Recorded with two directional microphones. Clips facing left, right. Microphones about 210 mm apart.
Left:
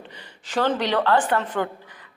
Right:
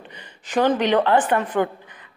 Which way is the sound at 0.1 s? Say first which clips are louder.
Right 4 dB; 15° right (ahead or behind).